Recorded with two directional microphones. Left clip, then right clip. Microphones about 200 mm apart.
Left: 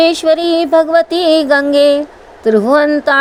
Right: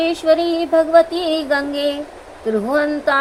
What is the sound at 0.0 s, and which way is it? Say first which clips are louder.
A woman's voice: left 5 dB; 35° left (ahead or behind).